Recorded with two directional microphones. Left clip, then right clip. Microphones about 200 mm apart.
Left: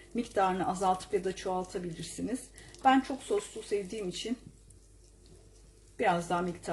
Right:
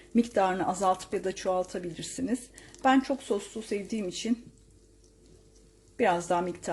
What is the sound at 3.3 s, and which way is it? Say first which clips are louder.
Speech: left 1 dB; 45° right (ahead or behind).